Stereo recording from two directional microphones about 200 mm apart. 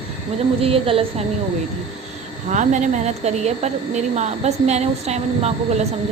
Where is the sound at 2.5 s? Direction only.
35° right (ahead or behind).